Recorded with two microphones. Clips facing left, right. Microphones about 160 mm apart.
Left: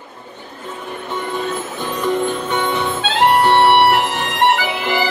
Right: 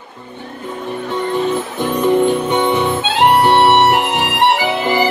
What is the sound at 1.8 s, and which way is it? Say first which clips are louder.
Music: right 6 dB; 15° right (ahead or behind).